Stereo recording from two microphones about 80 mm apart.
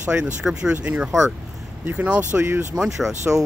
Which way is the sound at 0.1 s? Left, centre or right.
Centre.